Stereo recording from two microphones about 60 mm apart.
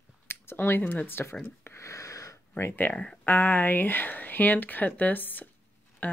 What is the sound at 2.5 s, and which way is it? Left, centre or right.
Speech, left.